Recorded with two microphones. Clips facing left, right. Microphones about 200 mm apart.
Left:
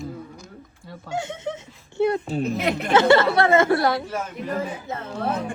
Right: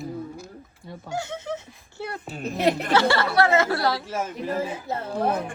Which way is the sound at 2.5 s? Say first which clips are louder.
Right 2 dB; 35° right (ahead or behind).